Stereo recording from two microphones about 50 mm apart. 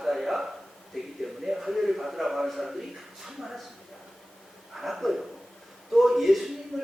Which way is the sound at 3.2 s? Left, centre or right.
Centre.